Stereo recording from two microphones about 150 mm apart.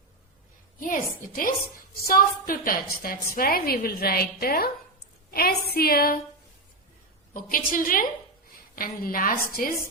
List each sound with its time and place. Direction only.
1.3 s a woman's voice: 75° left (ahead or behind); by 6.1 s 90° left
7.5 s a woman's voice: 70° left (ahead or behind)